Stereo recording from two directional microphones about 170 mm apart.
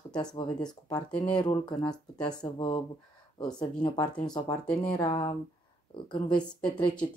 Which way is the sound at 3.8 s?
25° left (ahead or behind).